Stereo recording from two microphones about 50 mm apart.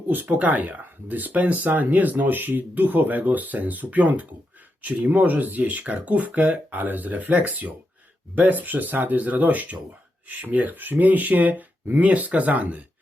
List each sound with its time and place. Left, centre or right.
0.1 s speech: right